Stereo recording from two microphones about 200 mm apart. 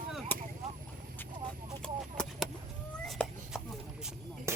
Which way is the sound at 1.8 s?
5° left (ahead or behind).